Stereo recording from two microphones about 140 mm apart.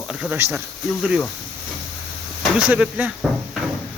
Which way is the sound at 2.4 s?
5° right (ahead or behind).